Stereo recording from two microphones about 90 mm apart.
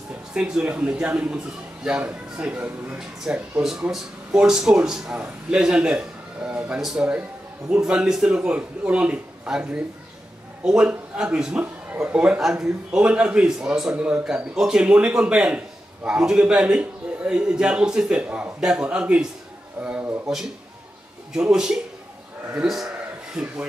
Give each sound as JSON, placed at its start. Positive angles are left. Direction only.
{"t": 0.3, "sound": "a man's voice", "side_deg": -10}
{"t": 11.6, "sound": "a man's voice", "side_deg": -20}
{"t": 21.3, "sound": "a man's voice", "side_deg": -5}